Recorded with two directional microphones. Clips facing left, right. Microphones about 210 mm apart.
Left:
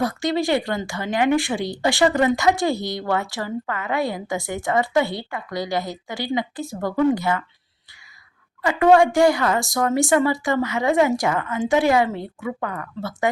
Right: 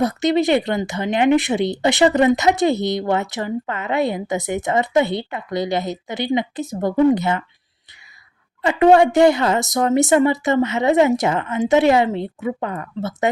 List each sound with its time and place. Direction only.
0.0 s speech: 20° right (ahead or behind)
8.6 s speech: 25° right (ahead or behind)